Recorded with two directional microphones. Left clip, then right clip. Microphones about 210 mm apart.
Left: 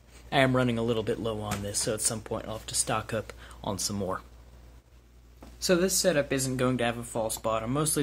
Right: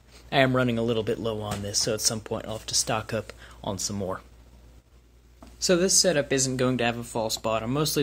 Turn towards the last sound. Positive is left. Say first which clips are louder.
# right 3 dB
turn(degrees=-15)  # may be behind; listen again after turning